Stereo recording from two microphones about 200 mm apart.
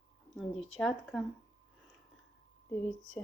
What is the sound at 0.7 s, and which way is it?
Speech, 5° left (ahead or behind).